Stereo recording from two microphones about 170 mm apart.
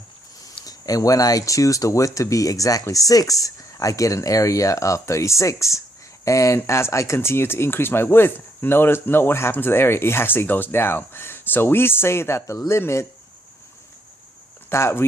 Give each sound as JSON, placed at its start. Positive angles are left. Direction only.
{"t": 0.4, "sound": "speech", "side_deg": 20}
{"t": 14.7, "sound": "speech", "side_deg": 15}